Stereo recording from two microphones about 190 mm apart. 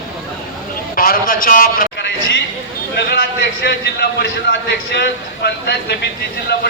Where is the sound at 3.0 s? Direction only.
60° left (ahead or behind).